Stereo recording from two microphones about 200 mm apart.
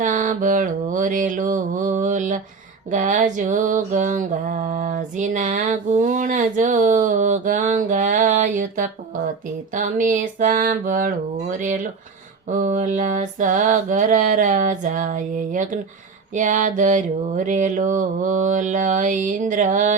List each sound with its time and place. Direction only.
0.0 s mantra: 40° right (ahead or behind)